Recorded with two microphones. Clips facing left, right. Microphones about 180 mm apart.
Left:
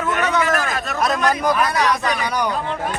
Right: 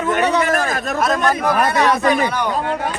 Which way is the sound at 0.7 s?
45° right (ahead or behind).